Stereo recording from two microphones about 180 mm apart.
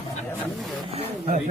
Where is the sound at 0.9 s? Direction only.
40° right (ahead or behind).